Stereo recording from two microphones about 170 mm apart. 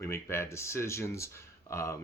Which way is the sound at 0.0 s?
15° left (ahead or behind).